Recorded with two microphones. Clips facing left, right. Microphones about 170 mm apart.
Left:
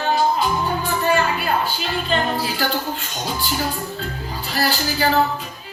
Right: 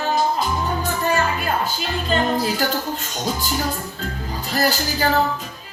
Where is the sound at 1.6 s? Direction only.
40° right (ahead or behind).